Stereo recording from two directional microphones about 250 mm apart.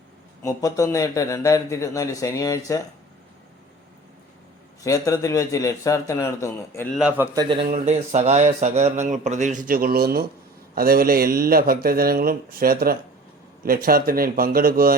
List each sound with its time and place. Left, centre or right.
0.4 s speech: centre
4.8 s speech: centre
6.9 s a man's voice: centre
7.3 s speech: right